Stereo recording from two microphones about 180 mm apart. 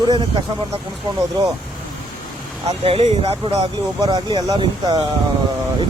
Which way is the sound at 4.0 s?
25° right (ahead or behind).